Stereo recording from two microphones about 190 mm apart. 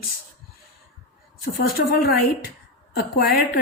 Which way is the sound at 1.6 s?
50° left (ahead or behind).